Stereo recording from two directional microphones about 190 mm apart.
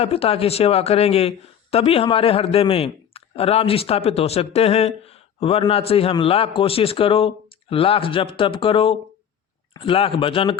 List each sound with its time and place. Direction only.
0.0 s speech: 30° left (ahead or behind)